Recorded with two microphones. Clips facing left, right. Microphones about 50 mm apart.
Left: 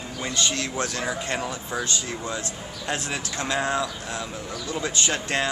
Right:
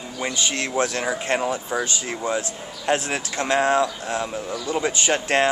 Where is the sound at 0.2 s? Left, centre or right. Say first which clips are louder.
Right 2 dB; right.